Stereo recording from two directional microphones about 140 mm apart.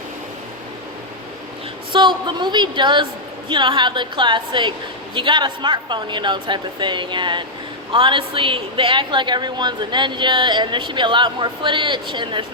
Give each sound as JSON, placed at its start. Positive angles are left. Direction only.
{"t": 1.9, "sound": "a woman's voice", "side_deg": -35}